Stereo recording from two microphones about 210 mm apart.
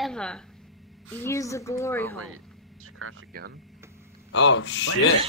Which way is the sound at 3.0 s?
85° right.